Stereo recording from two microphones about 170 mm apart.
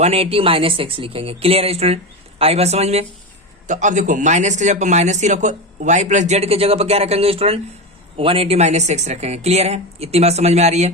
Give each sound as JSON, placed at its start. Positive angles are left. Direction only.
{"t": 0.0, "sound": "speech", "side_deg": -35}